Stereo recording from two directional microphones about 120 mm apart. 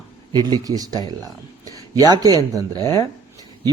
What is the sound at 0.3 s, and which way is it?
A man's voice, 35° right (ahead or behind).